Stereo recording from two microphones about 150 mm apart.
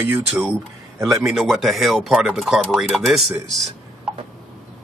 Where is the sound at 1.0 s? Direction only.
5° right (ahead or behind).